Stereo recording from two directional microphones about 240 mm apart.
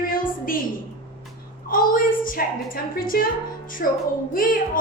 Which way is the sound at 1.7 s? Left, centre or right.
Left.